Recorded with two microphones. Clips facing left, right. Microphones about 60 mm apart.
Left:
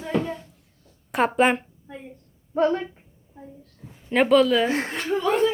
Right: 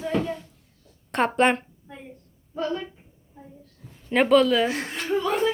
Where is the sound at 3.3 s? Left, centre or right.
Centre.